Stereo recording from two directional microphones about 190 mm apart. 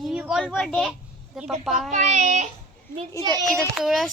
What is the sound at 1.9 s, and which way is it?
Child singing, 40° right (ahead or behind).